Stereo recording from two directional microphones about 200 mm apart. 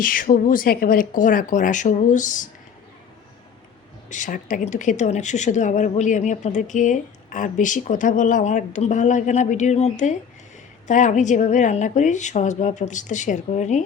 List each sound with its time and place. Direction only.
0.0 s speech: 45° left (ahead or behind)
4.1 s speech: 40° left (ahead or behind)